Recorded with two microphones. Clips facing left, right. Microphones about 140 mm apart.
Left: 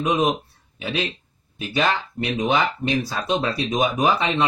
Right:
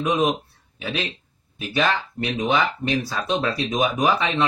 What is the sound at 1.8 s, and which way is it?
Speech, 15° left (ahead or behind).